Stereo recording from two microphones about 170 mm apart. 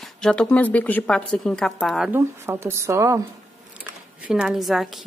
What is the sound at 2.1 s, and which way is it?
A woman's voice, 15° right (ahead or behind).